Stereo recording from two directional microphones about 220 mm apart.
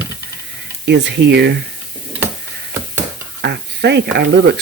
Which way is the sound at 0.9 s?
50° right (ahead or behind).